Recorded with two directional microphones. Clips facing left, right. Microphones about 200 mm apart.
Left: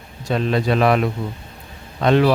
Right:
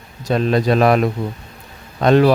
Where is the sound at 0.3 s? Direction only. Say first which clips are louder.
Right 3 dB; 40° right (ahead or behind).